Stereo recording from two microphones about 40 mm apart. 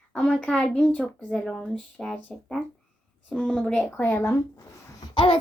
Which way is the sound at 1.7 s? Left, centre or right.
Centre.